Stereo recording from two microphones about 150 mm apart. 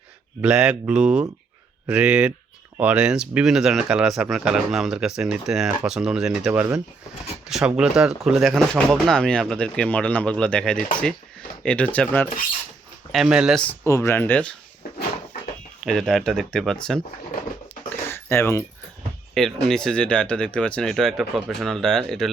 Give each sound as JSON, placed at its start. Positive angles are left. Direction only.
{"t": 0.4, "sound": "speech", "side_deg": -5}
{"t": 13.1, "sound": "speech", "side_deg": 0}
{"t": 13.8, "sound": "speech", "side_deg": 20}
{"t": 15.8, "sound": "speech", "side_deg": 5}
{"t": 17.8, "sound": "dog", "side_deg": 15}
{"t": 19.3, "sound": "speech", "side_deg": 0}